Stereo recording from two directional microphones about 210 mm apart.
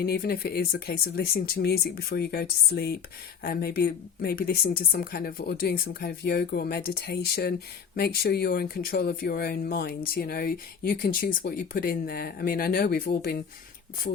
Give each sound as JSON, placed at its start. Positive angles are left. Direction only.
{"t": 0.0, "sound": "speech", "side_deg": 50}